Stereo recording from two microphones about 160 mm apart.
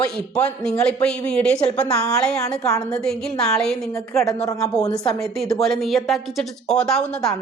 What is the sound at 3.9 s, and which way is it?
Speech, 20° left (ahead or behind).